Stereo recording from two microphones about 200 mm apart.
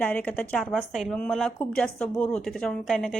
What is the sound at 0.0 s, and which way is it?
Speech, 5° left (ahead or behind).